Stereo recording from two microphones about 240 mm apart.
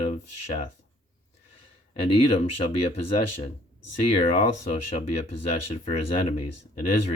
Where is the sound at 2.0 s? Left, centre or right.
Left.